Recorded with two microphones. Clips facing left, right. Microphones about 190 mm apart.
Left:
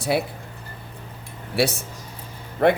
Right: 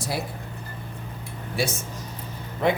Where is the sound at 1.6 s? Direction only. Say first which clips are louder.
Left 5 dB; 65° left (ahead or behind).